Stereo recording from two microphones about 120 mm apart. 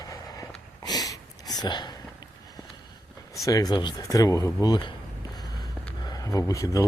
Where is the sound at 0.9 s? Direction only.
30° left (ahead or behind).